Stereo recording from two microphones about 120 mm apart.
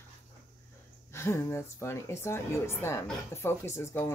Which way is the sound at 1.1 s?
20° left (ahead or behind).